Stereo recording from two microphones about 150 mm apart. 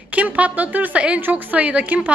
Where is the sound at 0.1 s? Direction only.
10° right (ahead or behind).